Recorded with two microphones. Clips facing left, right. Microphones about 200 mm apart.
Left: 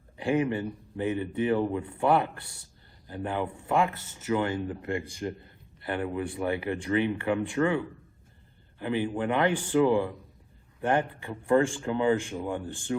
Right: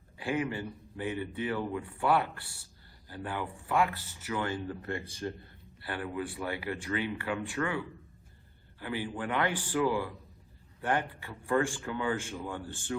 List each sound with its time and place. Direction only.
0.2 s speech: 25° left (ahead or behind)